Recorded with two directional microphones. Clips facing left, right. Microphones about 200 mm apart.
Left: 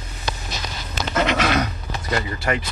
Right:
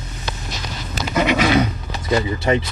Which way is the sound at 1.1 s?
10° right (ahead or behind).